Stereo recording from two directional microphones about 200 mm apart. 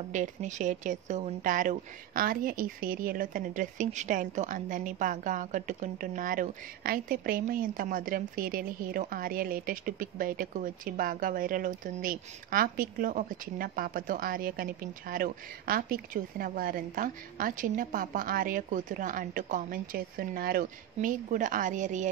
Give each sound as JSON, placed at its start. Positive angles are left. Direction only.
{"t": 0.1, "sound": "speech", "side_deg": -40}